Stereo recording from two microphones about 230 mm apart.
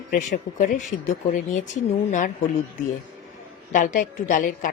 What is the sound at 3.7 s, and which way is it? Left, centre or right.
Speech, left.